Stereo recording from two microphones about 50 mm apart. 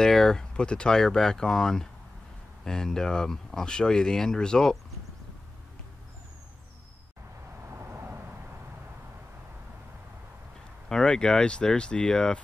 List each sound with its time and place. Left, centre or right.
0.0 s speech: centre
7.6 s vehicle: right
10.9 s speech: centre